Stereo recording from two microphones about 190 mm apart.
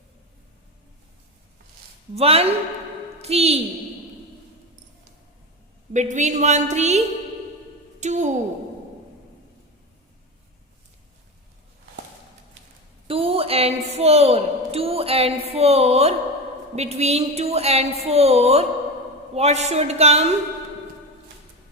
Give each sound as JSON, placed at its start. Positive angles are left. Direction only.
{"t": 2.1, "sound": "a woman's voice", "side_deg": -30}
{"t": 5.9, "sound": "a woman's voice", "side_deg": -40}
{"t": 8.0, "sound": "a woman's voice", "side_deg": -40}
{"t": 13.1, "sound": "a woman's voice", "side_deg": -30}